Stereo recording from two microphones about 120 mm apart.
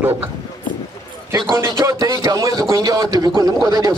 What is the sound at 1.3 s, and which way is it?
A man's voice, 40° right (ahead or behind).